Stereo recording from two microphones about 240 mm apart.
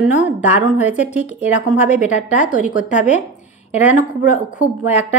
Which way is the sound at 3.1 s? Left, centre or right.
Left.